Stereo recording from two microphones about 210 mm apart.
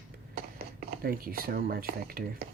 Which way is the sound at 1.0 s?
45° right (ahead or behind).